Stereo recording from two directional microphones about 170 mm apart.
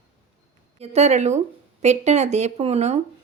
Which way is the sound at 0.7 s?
40° right (ahead or behind).